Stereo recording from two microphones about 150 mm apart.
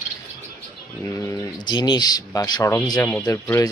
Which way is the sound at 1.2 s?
25° left (ahead or behind).